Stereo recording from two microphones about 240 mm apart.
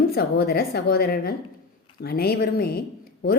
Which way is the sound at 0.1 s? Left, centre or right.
Left.